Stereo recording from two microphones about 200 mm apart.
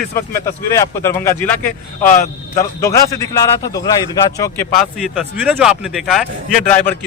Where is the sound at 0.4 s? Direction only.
15° left (ahead or behind).